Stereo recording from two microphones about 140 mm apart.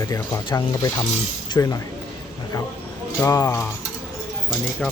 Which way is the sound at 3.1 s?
20° left (ahead or behind).